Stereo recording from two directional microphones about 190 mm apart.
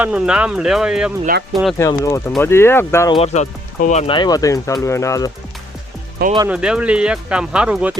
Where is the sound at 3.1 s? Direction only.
35° left (ahead or behind).